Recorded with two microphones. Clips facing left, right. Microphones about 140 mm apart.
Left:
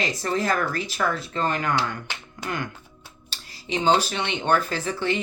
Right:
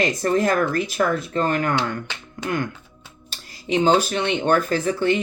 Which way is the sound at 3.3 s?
45° right (ahead or behind).